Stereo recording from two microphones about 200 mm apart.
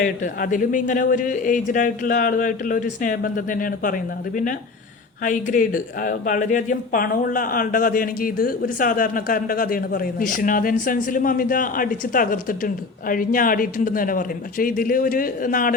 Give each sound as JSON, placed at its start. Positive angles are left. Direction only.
{"t": 0.0, "sound": "speech", "side_deg": 45}